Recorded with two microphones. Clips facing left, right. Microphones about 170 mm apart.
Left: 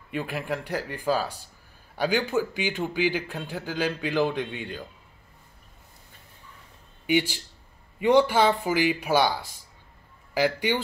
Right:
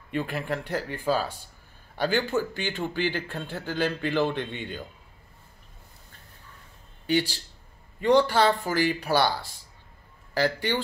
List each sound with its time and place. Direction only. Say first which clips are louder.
0.1 s a man's voice: right 1 dB; 5° left (ahead or behind)
7.1 s speech: left 1 dB; 15° left (ahead or behind)